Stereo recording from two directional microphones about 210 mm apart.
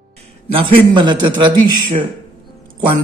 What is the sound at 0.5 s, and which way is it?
Speech, 25° right (ahead or behind).